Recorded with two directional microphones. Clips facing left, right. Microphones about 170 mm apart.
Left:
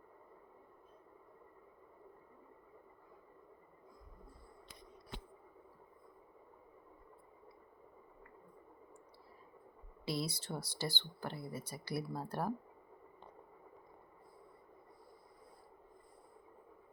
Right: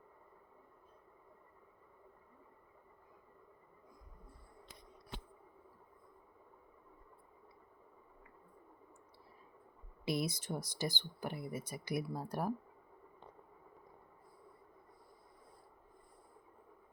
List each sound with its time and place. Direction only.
10.1 s speech: 20° right (ahead or behind)